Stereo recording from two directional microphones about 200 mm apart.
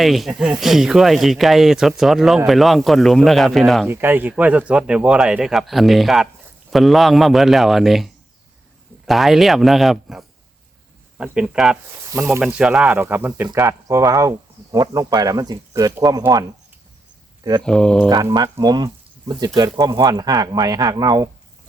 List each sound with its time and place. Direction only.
0.0 s speech: centre (ahead or behind)
3.8 s speech: 10° right (ahead or behind)
17.6 s speech: 5° left (ahead or behind)
18.1 s speech: 20° right (ahead or behind)